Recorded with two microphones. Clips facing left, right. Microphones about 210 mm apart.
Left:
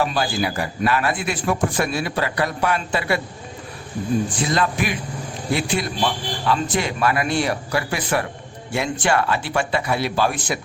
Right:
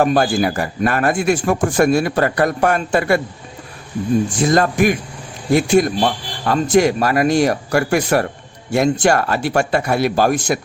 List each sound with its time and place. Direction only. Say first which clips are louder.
0.0 s speech: right 7 dB; 50° right (ahead or behind)
4.4 s speech: right 7 dB; 45° right (ahead or behind)